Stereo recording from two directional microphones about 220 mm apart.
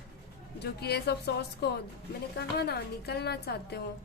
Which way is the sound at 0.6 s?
50° left (ahead or behind).